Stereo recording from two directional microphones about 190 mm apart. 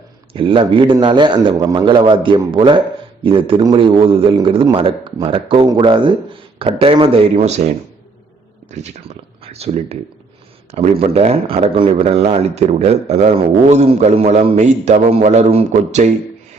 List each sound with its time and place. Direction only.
0.3 s a man's voice: 25° right (ahead or behind)
8.7 s a man's voice: 35° right (ahead or behind)